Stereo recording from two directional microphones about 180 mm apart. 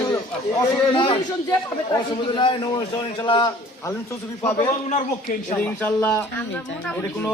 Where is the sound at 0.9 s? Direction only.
25° left (ahead or behind).